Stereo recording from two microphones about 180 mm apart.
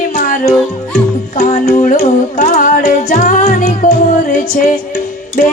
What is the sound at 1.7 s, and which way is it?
Music, 45° left (ahead or behind).